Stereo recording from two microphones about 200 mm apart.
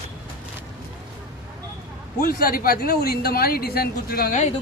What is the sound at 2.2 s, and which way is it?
Speech, 45° left (ahead or behind).